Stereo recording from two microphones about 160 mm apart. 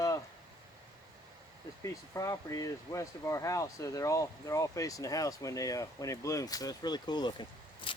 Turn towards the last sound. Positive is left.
turn(degrees=30)  # may be behind; listen again after turning